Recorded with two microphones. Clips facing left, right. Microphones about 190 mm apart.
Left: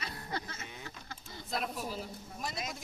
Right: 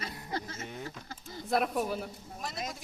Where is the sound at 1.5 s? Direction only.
60° right (ahead or behind).